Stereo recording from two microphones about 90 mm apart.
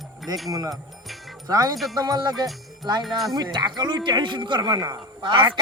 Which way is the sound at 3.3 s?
50° right (ahead or behind).